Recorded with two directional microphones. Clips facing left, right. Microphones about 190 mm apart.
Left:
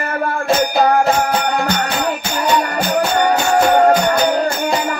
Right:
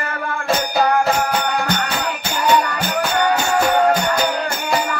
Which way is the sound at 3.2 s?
35° left (ahead or behind).